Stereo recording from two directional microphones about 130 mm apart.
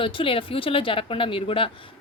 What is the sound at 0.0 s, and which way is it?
A woman's voice, 40° left (ahead or behind).